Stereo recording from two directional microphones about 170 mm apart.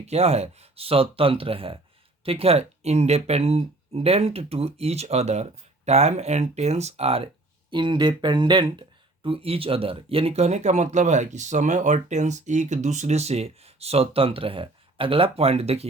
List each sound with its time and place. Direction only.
0.0 s speech: 40° right (ahead or behind)